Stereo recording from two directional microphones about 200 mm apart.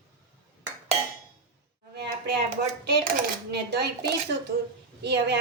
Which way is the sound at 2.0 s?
55° right (ahead or behind).